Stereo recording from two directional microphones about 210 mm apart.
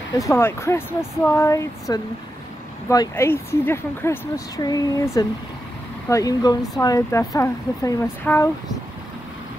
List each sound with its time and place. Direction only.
0.2 s speech: 10° left (ahead or behind)